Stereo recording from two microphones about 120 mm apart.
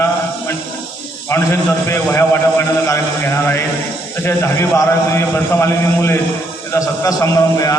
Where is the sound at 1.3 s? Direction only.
20° left (ahead or behind).